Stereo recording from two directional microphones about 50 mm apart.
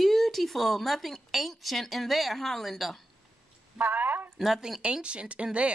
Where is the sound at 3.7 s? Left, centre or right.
Right.